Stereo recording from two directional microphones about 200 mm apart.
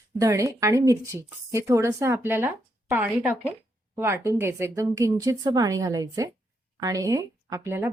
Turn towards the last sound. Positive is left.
turn(degrees=-10)  # may be behind; listen again after turning